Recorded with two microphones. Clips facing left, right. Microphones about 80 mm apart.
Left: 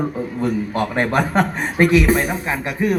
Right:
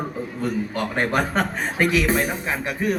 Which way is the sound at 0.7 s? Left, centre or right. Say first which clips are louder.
Left 3 dB; left.